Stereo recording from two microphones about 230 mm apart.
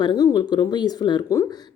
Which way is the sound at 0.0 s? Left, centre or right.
Centre.